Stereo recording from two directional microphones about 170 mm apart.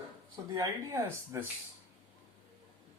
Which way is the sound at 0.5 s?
20° right (ahead or behind).